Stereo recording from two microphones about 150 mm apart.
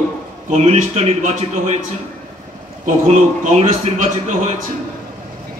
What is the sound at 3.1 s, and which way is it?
A man's voice, 45° right (ahead or behind).